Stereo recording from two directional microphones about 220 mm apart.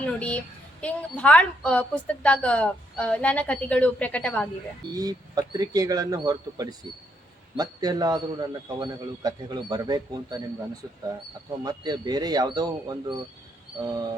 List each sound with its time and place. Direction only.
0.2 s a woman's voice: 5° left (ahead or behind)
4.9 s a man's voice: 15° right (ahead or behind)
11.6 s a man's voice: 20° right (ahead or behind)